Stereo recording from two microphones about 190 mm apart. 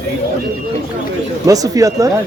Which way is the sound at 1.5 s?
20° right (ahead or behind).